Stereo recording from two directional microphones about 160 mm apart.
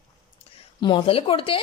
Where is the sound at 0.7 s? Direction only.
30° left (ahead or behind).